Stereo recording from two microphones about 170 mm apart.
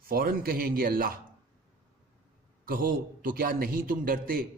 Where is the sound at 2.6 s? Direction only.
55° right (ahead or behind).